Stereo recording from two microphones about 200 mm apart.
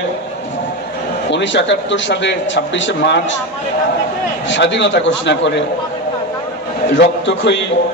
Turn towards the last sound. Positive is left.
turn(degrees=65)  # may be behind; listen again after turning